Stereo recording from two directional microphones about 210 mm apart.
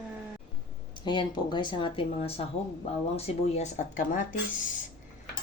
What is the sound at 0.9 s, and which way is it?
Speech, 20° left (ahead or behind).